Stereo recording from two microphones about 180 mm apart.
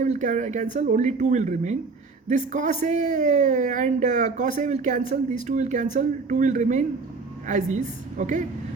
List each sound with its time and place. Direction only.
0.0 s a man's voice: 45° right (ahead or behind)